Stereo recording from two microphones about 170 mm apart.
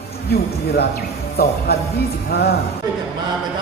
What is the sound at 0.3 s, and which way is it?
Speech, 70° left (ahead or behind).